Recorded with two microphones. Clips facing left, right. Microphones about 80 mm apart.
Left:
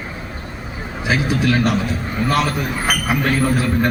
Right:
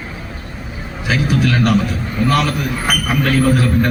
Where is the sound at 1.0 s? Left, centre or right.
Left.